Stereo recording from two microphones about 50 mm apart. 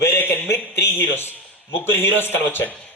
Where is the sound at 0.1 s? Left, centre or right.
Left.